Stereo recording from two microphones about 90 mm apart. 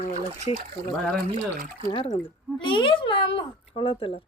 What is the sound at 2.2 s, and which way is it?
Speech, 65° left (ahead or behind).